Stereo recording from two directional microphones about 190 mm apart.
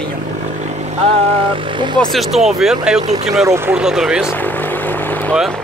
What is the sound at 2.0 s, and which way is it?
Speech, centre (ahead or behind).